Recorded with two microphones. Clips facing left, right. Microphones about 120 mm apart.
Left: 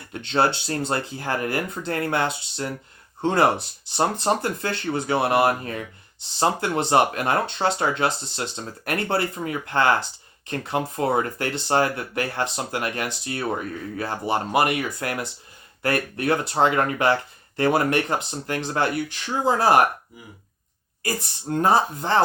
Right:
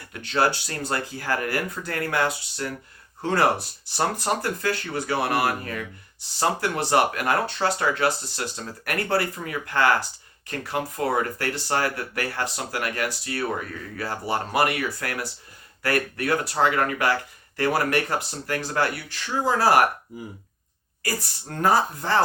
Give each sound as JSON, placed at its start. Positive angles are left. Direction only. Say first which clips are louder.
{"t": 0.1, "sound": "speech", "louder": "left 1 dB", "side_deg": 25}
{"t": 21.0, "sound": "speech", "louder": "left 2 dB", "side_deg": 20}